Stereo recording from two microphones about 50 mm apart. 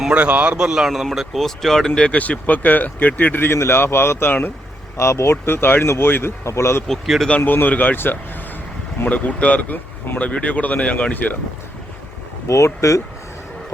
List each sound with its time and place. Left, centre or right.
0.1 s speech: right
0.9 s speech: centre
2.0 s speech: left
3.5 s speech: left
4.3 s speech: left
4.9 s speech: left
5.8 s speech: left
6.1 s speech: left
6.4 s speech: left
7.4 s speech: left
7.9 s speech: left
9.0 s speech: left
12.5 s speech: left